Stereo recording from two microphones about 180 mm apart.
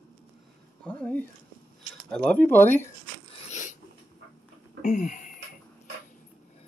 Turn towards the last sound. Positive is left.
turn(degrees=45)  # may be behind; listen again after turning